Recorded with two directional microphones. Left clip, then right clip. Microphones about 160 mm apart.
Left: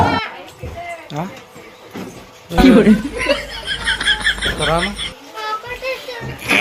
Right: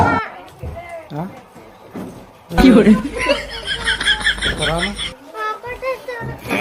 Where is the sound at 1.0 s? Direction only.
5° right (ahead or behind).